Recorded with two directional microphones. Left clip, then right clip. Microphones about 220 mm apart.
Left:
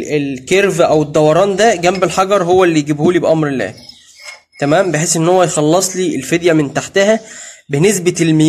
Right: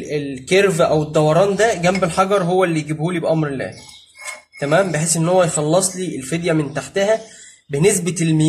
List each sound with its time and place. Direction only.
0.1 s speech: 30° left (ahead or behind)